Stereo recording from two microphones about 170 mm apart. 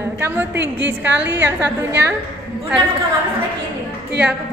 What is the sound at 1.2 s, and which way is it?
Speech, 90° right.